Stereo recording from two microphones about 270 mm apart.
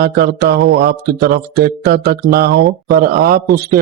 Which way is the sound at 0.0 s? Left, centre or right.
Right.